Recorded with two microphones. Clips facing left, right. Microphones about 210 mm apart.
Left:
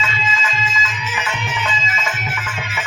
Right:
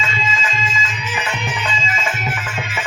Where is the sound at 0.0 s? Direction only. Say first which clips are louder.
Even; 30° right (ahead or behind).